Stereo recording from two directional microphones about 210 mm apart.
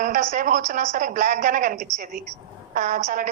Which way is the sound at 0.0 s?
35° right (ahead or behind).